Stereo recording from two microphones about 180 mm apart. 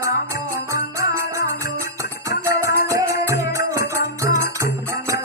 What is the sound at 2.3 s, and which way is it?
Music, 15° right (ahead or behind).